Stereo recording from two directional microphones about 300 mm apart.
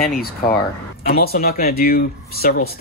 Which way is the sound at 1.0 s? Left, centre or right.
Left.